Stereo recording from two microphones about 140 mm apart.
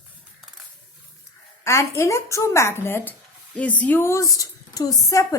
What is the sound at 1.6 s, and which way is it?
Speech, 20° left (ahead or behind).